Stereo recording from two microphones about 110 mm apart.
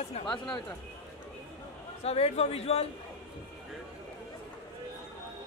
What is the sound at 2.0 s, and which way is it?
Speech, 70° left (ahead or behind).